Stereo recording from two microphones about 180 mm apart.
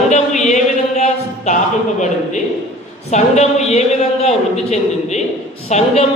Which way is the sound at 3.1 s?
40° left (ahead or behind).